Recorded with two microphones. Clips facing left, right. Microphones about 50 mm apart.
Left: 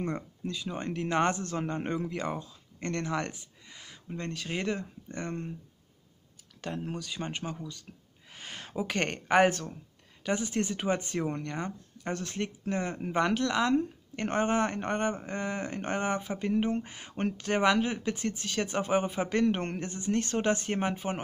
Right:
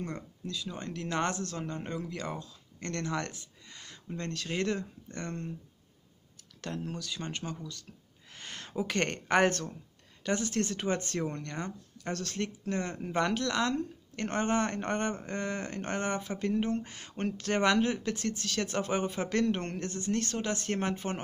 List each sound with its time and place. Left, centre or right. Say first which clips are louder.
0.0 s speech: left 5 dB; left
6.6 s speech: left 2 dB; centre
20.6 s speech: left 1 dB; centre